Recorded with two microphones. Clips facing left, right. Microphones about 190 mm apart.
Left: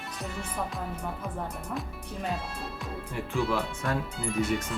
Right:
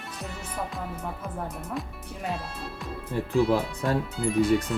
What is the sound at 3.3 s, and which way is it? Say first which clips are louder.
Speech: right 6 dB; 35° right (ahead or behind).